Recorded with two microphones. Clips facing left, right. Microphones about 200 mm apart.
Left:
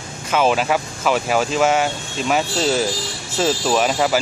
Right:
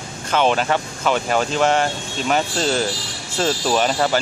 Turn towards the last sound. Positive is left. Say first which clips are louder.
# left 1 dB
turn(degrees=5)  # may be behind; listen again after turning